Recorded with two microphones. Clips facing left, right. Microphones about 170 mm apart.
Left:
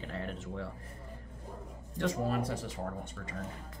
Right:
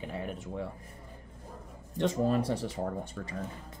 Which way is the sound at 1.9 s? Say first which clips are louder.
Right 4 dB; 25° right (ahead or behind).